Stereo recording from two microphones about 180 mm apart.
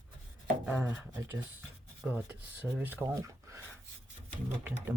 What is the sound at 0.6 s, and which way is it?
Speech, 10° right (ahead or behind).